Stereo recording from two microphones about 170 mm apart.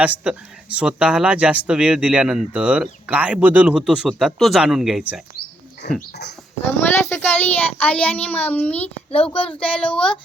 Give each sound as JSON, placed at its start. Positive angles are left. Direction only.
{"t": 0.0, "sound": "speech", "side_deg": -10}
{"t": 5.8, "sound": "speech", "side_deg": 70}
{"t": 6.7, "sound": "a child's voice", "side_deg": 10}
{"t": 9.1, "sound": "a child's voice", "side_deg": 35}
{"t": 9.6, "sound": "a child's voice", "side_deg": 5}